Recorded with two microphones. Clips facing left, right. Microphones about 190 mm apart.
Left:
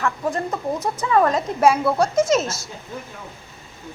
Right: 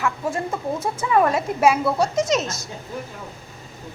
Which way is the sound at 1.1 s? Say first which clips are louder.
Even; 10° right (ahead or behind).